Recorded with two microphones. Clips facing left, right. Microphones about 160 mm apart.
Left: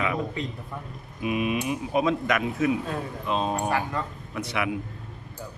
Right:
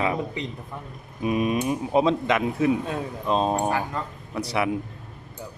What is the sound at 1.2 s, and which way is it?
Speech, 35° right (ahead or behind).